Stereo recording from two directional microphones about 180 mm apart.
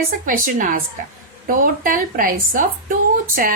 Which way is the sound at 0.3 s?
50° right (ahead or behind).